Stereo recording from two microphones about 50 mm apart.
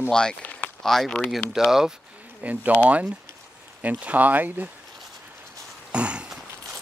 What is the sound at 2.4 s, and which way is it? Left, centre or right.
Speech, right.